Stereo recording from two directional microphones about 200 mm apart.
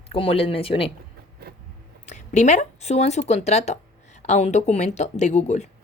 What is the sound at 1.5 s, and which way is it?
Biting, 50° right (ahead or behind).